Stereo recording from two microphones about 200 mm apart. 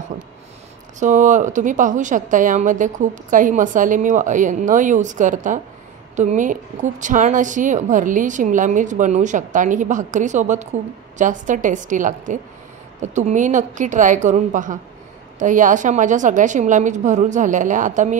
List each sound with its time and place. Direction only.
0.9 s a woman's voice: 40° right (ahead or behind)